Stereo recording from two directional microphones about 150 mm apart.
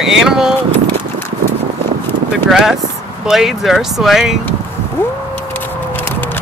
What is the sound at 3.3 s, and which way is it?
Speech, centre (ahead or behind).